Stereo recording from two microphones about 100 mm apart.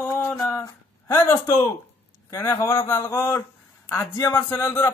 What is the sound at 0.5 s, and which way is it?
Speech, 30° left (ahead or behind).